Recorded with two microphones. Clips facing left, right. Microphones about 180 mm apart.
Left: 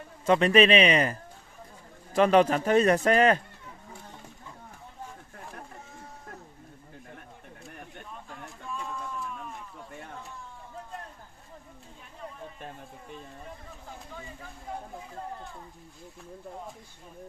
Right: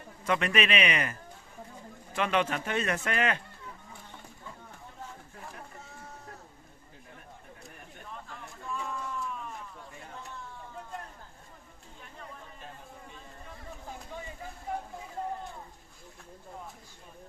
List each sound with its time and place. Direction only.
0.3 s speech: 30° left (ahead or behind)
2.1 s speech: 40° left (ahead or behind)